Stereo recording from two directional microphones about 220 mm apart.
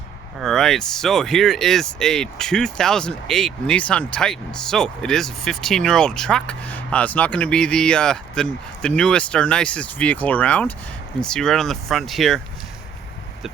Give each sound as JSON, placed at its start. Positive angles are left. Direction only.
{"t": 0.3, "sound": "speech", "side_deg": 0}